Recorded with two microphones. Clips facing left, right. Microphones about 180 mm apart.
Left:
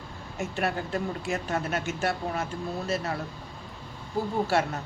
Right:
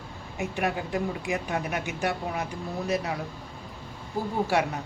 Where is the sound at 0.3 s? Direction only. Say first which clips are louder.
Right 1 dB; 15° right (ahead or behind).